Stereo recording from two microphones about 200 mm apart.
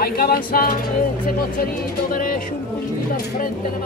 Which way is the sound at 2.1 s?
45° left (ahead or behind).